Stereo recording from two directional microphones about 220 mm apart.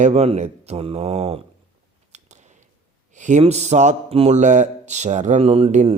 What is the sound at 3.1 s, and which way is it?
Speech, 35° right (ahead or behind).